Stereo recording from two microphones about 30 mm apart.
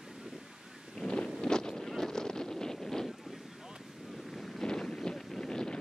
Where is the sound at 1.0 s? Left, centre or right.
Left.